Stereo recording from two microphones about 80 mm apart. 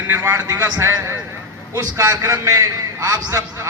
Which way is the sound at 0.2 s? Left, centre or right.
Right.